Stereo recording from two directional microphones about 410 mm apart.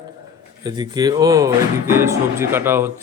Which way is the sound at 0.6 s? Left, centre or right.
Centre.